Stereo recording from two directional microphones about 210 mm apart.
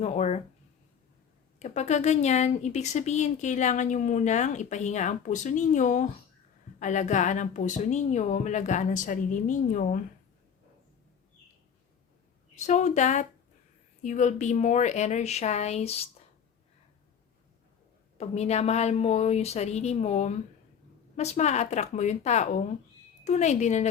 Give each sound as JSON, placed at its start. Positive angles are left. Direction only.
{"t": 0.0, "sound": "speech", "side_deg": 30}
{"t": 1.5, "sound": "speech", "side_deg": 35}
{"t": 12.5, "sound": "speech", "side_deg": 35}
{"t": 18.2, "sound": "speech", "side_deg": 30}